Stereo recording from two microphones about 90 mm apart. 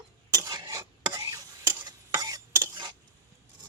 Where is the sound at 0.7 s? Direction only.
45° right (ahead or behind).